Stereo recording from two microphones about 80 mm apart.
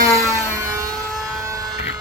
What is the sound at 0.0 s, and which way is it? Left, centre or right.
Music, right.